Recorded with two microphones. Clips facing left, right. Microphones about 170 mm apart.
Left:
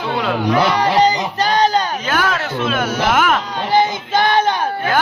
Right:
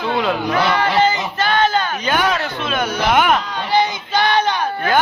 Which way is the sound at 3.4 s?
45° left (ahead or behind).